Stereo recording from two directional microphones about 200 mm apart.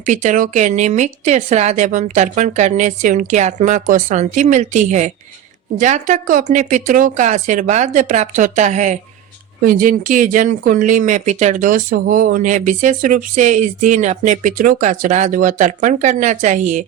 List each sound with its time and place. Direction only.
0.0 s speech: 40° right (ahead or behind)